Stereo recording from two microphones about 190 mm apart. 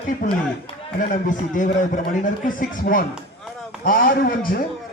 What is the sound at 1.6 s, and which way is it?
A man's voice, 45° left (ahead or behind).